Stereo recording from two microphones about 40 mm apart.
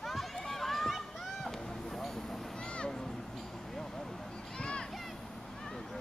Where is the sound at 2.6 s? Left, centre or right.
Left.